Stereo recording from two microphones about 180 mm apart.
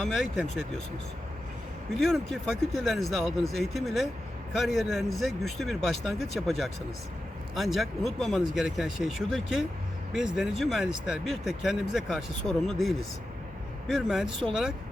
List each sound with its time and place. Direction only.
0.0 s speech: 5° right (ahead or behind)
2.0 s speech: centre (ahead or behind)